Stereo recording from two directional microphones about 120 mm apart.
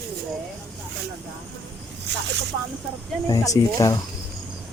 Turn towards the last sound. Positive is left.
turn(degrees=30)  # may be behind; listen again after turning